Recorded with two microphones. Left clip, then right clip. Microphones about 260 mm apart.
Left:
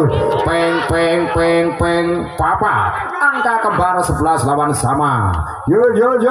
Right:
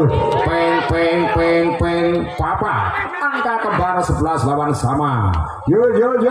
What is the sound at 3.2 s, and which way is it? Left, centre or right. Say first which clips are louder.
Speech: left 6 dB; left.